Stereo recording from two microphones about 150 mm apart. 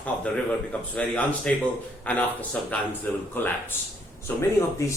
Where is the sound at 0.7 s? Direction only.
10° left (ahead or behind).